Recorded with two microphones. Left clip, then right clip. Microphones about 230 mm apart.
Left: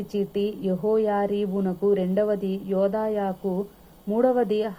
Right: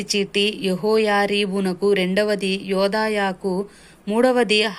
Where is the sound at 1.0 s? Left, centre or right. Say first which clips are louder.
Right 5 dB; centre.